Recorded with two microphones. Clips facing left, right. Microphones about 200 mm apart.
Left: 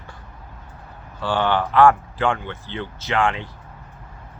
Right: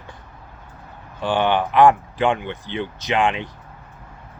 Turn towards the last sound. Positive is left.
turn(degrees=-20)  # may be behind; listen again after turning